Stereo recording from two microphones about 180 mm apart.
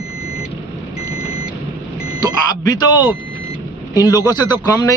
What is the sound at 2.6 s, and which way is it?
Speech, 20° left (ahead or behind).